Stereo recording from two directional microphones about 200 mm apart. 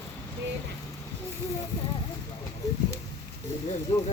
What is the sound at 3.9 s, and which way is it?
Speech, 30° left (ahead or behind).